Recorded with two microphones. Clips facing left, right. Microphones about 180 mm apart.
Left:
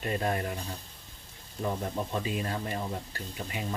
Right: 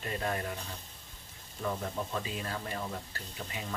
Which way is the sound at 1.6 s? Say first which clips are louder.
Left 3 dB; 25° left (ahead or behind).